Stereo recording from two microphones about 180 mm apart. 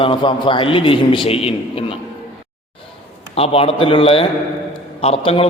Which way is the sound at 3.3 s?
35° left (ahead or behind).